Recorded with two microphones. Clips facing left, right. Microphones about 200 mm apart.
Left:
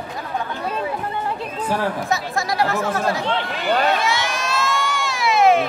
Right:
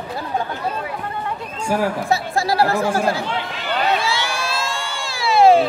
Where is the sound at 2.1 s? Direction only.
30° right (ahead or behind).